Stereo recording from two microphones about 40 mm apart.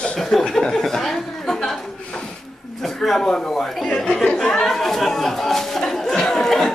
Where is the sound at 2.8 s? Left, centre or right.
Centre.